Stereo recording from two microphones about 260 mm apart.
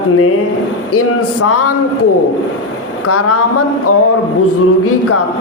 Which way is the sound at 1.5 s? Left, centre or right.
Left.